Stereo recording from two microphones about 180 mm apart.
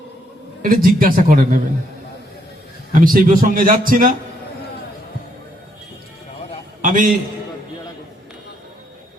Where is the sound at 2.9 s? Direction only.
50° right (ahead or behind).